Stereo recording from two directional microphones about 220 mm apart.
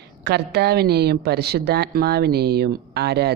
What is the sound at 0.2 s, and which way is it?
A woman's voice, 50° right (ahead or behind).